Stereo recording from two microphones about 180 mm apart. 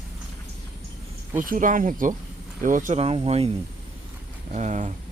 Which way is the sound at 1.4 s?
45° right (ahead or behind).